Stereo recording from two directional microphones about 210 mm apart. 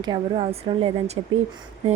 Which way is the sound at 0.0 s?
25° right (ahead or behind).